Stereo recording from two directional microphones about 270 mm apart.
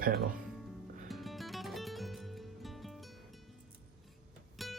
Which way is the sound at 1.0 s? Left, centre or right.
Centre.